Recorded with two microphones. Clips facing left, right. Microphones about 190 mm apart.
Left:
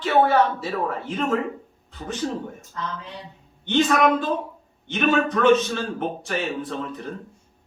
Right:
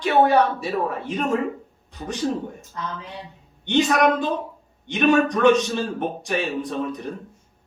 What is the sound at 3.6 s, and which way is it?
A man's voice, 15° right (ahead or behind).